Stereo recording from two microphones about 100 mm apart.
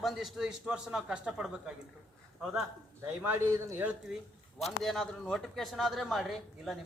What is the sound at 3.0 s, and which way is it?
Speech, 20° right (ahead or behind).